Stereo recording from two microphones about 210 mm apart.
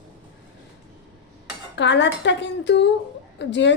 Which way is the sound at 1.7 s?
60° left (ahead or behind).